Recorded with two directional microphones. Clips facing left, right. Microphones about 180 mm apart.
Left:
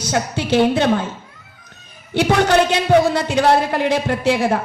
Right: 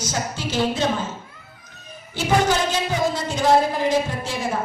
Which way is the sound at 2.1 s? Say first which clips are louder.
Left 5 dB; 70° left (ahead or behind).